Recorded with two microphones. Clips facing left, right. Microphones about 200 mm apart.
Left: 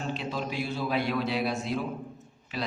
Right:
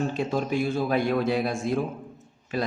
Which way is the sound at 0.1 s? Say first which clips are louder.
Right 6 dB; 50° right (ahead or behind).